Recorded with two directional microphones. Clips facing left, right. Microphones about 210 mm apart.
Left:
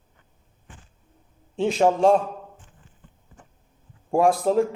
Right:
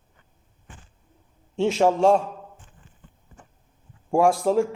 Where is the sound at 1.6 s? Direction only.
15° left (ahead or behind).